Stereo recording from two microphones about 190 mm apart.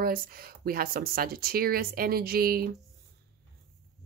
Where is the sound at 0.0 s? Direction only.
50° right (ahead or behind).